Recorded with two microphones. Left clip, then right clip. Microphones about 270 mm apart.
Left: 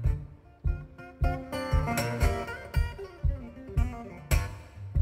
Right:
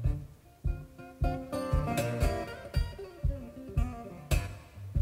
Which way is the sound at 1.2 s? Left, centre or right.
Left.